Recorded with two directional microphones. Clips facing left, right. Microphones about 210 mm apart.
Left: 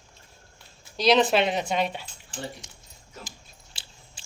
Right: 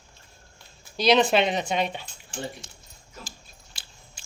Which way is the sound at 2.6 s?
15° left (ahead or behind).